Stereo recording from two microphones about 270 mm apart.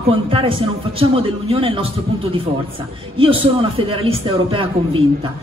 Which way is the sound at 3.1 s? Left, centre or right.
Centre.